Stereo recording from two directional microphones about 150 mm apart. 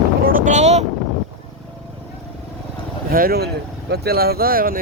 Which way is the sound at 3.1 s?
75° right (ahead or behind).